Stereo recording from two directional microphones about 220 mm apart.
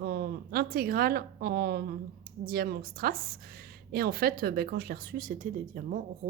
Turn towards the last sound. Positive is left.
turn(degrees=-35)  # may be behind; listen again after turning